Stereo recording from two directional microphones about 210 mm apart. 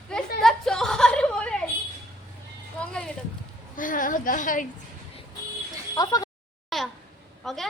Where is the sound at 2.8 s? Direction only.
5° left (ahead or behind).